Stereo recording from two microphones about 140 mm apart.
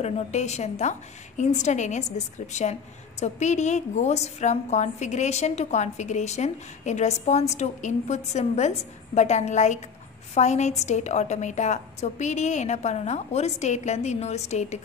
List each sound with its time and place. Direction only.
0.0 s a woman's voice: 55° left (ahead or behind)